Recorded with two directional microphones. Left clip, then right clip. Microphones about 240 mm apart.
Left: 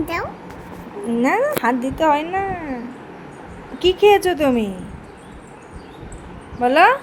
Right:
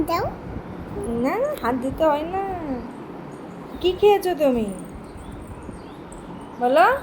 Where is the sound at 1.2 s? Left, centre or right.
Left.